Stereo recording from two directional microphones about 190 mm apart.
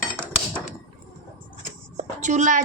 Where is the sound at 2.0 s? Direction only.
40° right (ahead or behind).